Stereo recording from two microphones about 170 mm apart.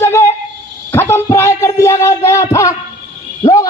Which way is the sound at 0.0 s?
15° left (ahead or behind).